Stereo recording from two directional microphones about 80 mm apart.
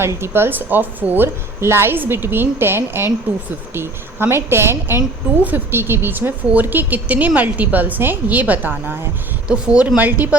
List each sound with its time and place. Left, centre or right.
0.0 s a woman's voice: right